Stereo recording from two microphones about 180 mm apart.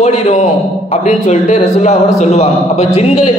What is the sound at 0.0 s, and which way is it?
A man's voice, 40° left (ahead or behind).